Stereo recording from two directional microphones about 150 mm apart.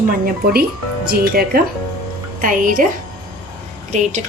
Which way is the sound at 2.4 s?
65° right (ahead or behind).